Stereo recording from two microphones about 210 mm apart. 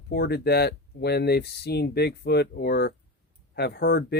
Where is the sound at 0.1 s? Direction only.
50° left (ahead or behind).